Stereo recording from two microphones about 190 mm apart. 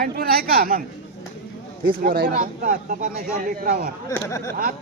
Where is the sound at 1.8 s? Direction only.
50° right (ahead or behind).